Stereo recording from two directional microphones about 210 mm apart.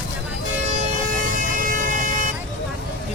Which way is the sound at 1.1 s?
40° right (ahead or behind).